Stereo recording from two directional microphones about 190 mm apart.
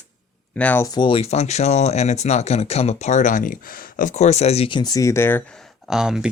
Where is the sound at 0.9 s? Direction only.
25° left (ahead or behind).